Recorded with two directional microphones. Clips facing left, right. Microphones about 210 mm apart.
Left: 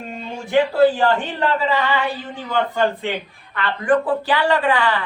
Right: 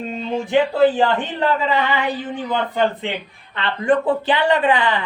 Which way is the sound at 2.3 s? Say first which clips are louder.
Even; 20° right (ahead or behind).